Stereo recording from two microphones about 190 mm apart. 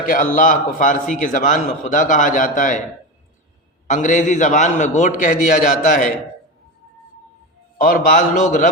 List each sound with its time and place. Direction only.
0.1 s a man's voice: 45° left (ahead or behind)
3.8 s a man's voice: 40° left (ahead or behind)
7.8 s a man's voice: 45° left (ahead or behind)